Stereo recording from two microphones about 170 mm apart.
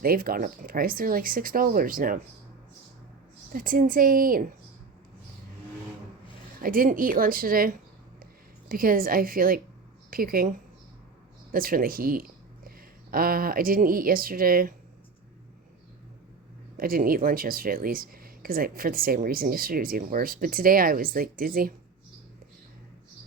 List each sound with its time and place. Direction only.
0.0 s speech: 60° right (ahead or behind)
3.5 s a woman's voice: 55° right (ahead or behind)
6.6 s speech: 55° right (ahead or behind)
11.5 s speech: 55° right (ahead or behind)
16.7 s speech: 60° right (ahead or behind)